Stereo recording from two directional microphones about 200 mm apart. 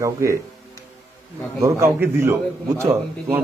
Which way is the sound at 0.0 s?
15° right (ahead or behind).